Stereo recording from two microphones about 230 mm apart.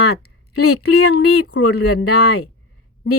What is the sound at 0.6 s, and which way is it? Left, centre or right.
Speech, left.